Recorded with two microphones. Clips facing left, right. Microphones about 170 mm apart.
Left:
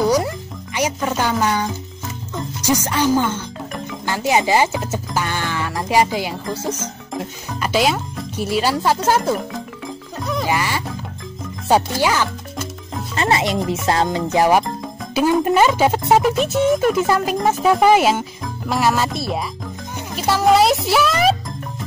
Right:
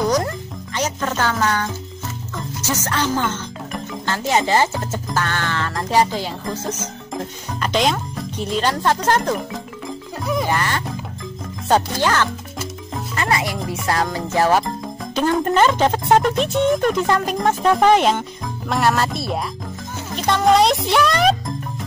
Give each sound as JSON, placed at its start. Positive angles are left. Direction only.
{"t": 0.0, "sound": "music", "side_deg": 10}
{"t": 0.7, "sound": "speech", "side_deg": 10}
{"t": 10.4, "sound": "music", "side_deg": 10}
{"t": 11.6, "sound": "speech", "side_deg": 10}
{"t": 13.1, "sound": "speech", "side_deg": 25}
{"t": 13.8, "sound": "music", "side_deg": 25}
{"t": 15.1, "sound": "speech", "side_deg": 10}